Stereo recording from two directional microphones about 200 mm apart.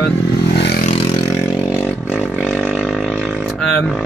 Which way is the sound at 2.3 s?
5° left (ahead or behind).